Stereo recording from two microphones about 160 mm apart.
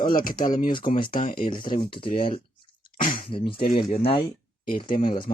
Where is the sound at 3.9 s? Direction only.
35° left (ahead or behind).